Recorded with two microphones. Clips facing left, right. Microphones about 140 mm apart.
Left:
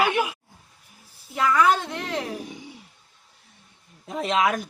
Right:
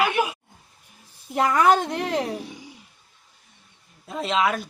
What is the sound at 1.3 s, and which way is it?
Speech, 45° right (ahead or behind).